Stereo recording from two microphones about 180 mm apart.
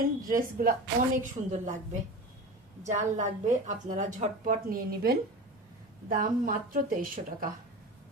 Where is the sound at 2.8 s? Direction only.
40° right (ahead or behind).